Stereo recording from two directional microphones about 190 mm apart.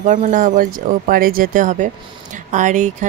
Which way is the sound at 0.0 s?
40° right (ahead or behind).